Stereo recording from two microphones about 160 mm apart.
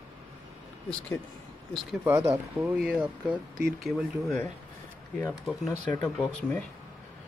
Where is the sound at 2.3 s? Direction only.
15° right (ahead or behind).